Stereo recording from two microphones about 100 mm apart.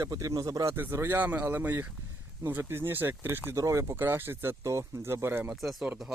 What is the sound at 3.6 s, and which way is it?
Speech, 30° right (ahead or behind).